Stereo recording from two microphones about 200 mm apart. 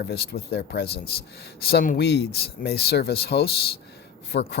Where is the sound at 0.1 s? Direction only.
55° left (ahead or behind).